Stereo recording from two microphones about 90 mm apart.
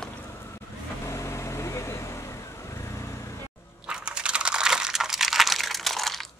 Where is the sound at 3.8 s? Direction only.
10° right (ahead or behind).